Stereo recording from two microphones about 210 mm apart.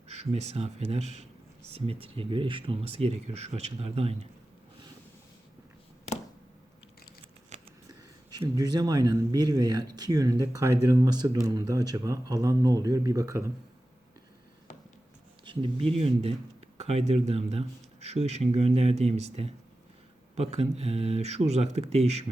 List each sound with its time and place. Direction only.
0.1 s speech: 30° right (ahead or behind)
7.5 s a sound: 35° right (ahead or behind)
8.3 s speech: 20° right (ahead or behind)
15.4 s speech: 25° right (ahead or behind)